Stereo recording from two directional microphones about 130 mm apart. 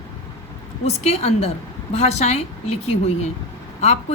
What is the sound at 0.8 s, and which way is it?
Speech, 55° left (ahead or behind).